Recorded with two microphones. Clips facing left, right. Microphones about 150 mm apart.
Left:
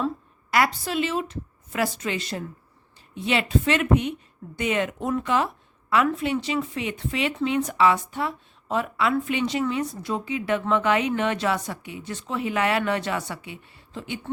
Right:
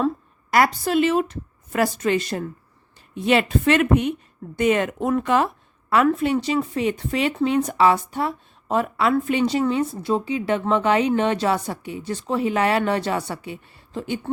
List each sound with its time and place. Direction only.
0.5 s speech: 45° right (ahead or behind)